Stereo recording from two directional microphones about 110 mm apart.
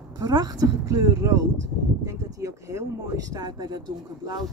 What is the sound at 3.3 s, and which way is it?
Speech, 40° right (ahead or behind).